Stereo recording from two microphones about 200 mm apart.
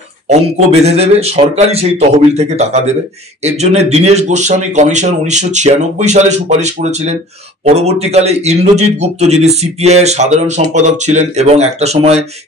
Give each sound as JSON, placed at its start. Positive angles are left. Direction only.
{"t": 0.3, "sound": "speech", "side_deg": -30}